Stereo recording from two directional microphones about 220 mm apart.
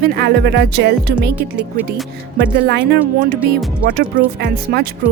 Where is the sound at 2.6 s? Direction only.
50° right (ahead or behind).